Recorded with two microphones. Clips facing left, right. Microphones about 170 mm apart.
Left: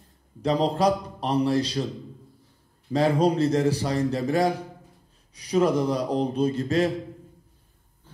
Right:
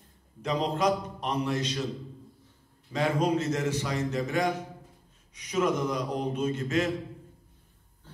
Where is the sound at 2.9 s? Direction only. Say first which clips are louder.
Left 5 dB; 35° left (ahead or behind).